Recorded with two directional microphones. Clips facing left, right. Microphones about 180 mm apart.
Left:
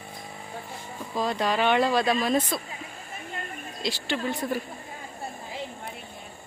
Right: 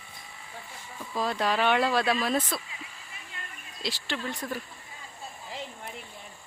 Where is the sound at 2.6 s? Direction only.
45° left (ahead or behind).